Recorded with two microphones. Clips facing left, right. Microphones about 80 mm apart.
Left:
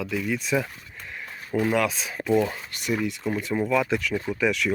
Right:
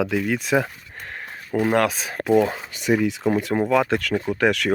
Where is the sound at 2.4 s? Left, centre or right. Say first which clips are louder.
Right 5 dB; right.